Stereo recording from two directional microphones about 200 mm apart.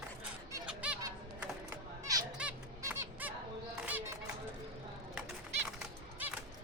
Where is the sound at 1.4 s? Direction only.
15° right (ahead or behind).